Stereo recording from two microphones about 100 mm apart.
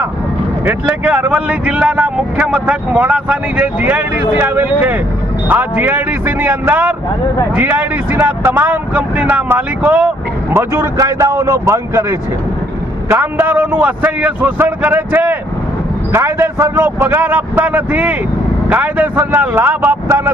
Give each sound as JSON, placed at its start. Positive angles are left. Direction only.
{"t": 0.6, "sound": "speech", "side_deg": -15}